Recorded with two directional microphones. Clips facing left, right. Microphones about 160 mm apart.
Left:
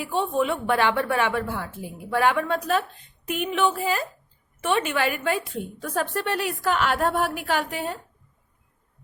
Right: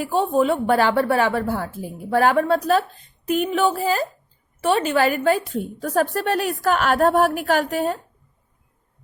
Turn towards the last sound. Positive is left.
turn(degrees=-45)  # may be behind; listen again after turning